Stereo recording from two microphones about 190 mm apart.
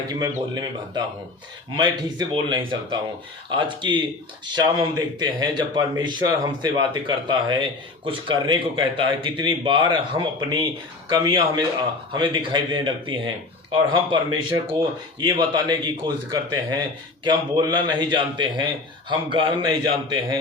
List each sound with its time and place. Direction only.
0.1 s speech: 20° right (ahead or behind)